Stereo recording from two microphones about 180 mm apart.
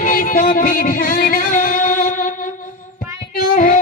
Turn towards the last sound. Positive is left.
turn(degrees=50)  # may be behind; listen again after turning